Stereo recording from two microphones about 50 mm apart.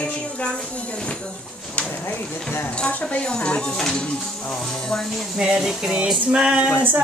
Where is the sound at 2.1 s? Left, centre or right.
Left.